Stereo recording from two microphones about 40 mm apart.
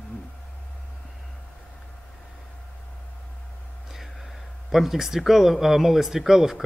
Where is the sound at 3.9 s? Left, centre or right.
Centre.